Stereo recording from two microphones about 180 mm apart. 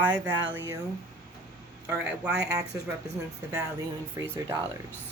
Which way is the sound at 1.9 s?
10° right (ahead or behind).